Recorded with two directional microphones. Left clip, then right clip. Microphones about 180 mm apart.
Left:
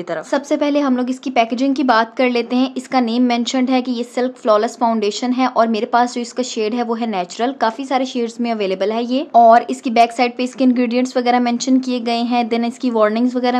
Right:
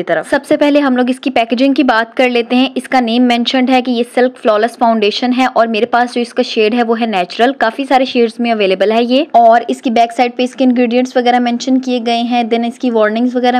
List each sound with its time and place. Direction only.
0.1 s a woman's voice: 20° right (ahead or behind)